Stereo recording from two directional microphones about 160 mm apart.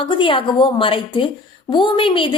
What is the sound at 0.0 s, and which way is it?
A woman's voice, 30° left (ahead or behind).